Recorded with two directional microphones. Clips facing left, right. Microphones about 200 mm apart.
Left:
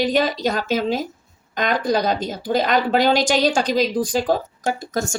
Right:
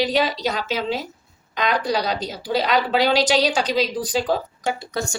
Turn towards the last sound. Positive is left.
turn(degrees=45)  # may be behind; listen again after turning